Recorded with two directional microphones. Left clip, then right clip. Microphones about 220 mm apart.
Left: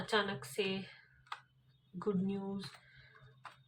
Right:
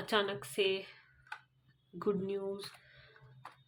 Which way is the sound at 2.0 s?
40° right (ahead or behind).